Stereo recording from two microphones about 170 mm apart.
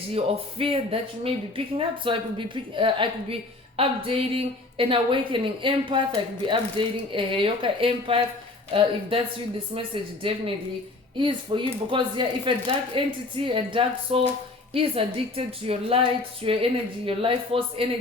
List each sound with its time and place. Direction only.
0.6 s a woman's voice: 35° right (ahead or behind)